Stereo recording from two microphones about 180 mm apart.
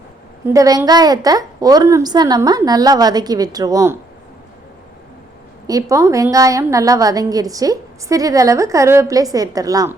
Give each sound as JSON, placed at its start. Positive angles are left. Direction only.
{"t": 0.4, "sound": "a woman's voice", "side_deg": -20}
{"t": 5.6, "sound": "a woman's voice", "side_deg": -20}